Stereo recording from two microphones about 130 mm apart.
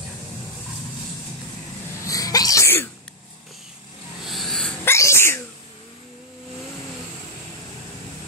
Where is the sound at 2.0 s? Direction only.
25° left (ahead or behind).